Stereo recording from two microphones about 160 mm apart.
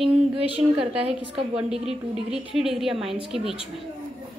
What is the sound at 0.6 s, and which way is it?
Speech, 35° right (ahead or behind).